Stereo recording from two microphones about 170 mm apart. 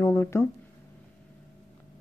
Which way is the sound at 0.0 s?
15° left (ahead or behind).